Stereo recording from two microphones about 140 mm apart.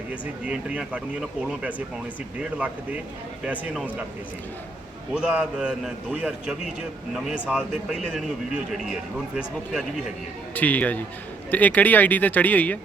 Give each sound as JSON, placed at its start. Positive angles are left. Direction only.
{"t": 0.1, "sound": "speech", "side_deg": -10}
{"t": 5.1, "sound": "speech", "side_deg": -5}
{"t": 10.5, "sound": "speech", "side_deg": 10}